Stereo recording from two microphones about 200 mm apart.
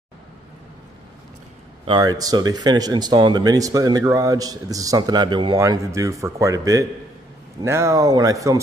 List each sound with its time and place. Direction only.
1.9 s speech: 20° right (ahead or behind)